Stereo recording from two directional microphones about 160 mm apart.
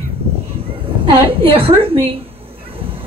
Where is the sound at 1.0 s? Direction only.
35° right (ahead or behind).